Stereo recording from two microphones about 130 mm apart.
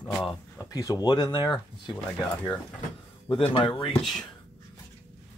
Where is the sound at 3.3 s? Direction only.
45° left (ahead or behind).